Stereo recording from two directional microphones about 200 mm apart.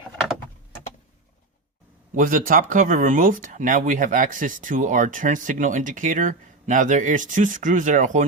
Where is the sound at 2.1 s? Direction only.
40° right (ahead or behind).